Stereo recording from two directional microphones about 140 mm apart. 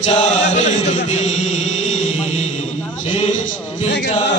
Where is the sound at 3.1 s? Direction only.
55° left (ahead or behind).